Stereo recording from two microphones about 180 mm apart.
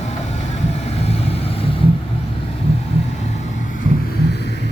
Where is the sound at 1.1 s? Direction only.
35° left (ahead or behind).